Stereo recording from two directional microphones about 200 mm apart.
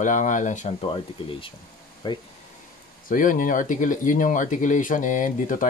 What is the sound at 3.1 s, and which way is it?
Speech, 40° left (ahead or behind).